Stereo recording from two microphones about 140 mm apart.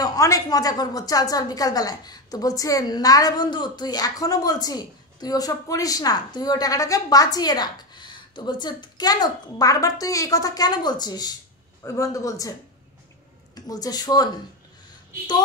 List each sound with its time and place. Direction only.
0.0 s a woman's voice: 25° left (ahead or behind)
13.6 s a woman's voice: 25° left (ahead or behind)